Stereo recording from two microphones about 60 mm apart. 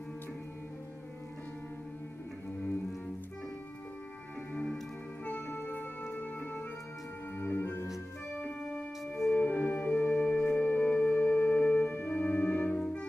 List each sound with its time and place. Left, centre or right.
5.2 s music: left
7.5 s music: left
8.4 s music: left
9.1 s music: left
12.7 s music: left